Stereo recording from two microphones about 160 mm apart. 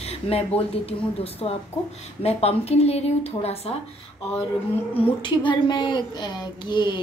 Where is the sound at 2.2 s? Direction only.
40° left (ahead or behind).